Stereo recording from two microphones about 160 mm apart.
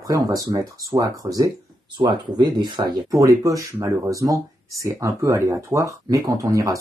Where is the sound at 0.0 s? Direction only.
25° right (ahead or behind).